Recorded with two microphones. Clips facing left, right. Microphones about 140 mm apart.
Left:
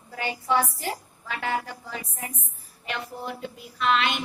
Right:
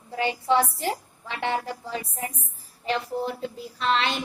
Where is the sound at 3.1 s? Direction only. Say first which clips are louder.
Right 6 dB; 35° right (ahead or behind).